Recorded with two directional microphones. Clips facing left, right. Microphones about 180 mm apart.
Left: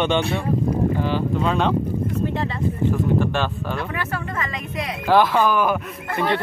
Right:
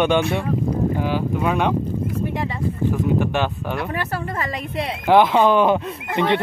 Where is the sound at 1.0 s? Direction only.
10° right (ahead or behind).